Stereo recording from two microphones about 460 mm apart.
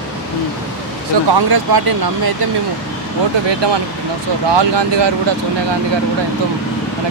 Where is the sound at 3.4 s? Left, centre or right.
Right.